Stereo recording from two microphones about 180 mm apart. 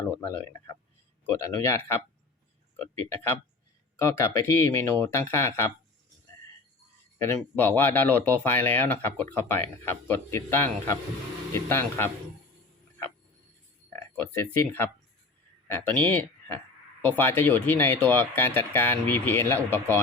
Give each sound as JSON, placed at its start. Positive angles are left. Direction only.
{"t": 0.2, "sound": "speech", "side_deg": 10}
{"t": 3.9, "sound": "speech", "side_deg": 15}
{"t": 7.2, "sound": "speech", "side_deg": 10}
{"t": 13.9, "sound": "speech", "side_deg": 15}